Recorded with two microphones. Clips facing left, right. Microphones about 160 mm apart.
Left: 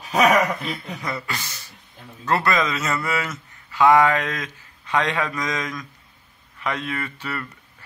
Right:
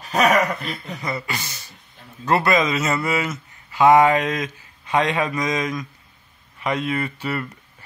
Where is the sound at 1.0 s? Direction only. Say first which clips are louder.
Right 3 dB; 10° right (ahead or behind).